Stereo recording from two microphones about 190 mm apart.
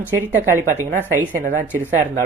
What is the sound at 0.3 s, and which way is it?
Speech, 15° right (ahead or behind).